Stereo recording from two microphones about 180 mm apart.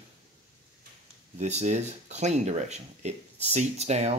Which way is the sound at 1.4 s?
40° right (ahead or behind).